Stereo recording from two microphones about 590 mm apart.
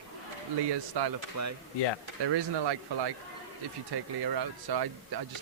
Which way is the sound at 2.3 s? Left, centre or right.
Right.